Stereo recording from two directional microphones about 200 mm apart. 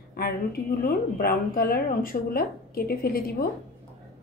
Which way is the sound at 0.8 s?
50° left (ahead or behind).